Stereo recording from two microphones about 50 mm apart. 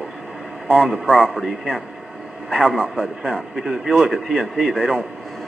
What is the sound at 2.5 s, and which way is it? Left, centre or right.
Speech, centre.